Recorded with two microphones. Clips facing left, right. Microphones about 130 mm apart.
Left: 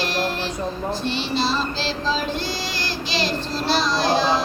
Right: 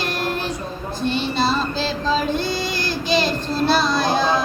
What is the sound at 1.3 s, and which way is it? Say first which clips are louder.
Child singing: right 1 dB; 50° right (ahead or behind).